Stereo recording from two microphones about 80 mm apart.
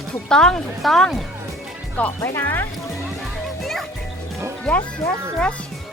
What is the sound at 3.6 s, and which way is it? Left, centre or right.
Music, centre.